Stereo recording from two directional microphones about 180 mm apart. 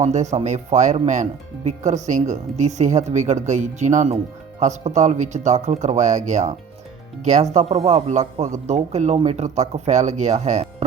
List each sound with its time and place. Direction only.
0.0 s speech: 40° right (ahead or behind)
7.5 s speech: 35° right (ahead or behind)